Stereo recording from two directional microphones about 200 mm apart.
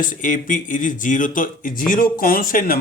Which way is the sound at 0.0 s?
40° left (ahead or behind).